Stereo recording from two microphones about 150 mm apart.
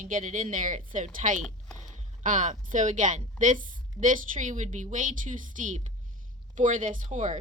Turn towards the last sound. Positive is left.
turn(degrees=-50)  # may be behind; listen again after turning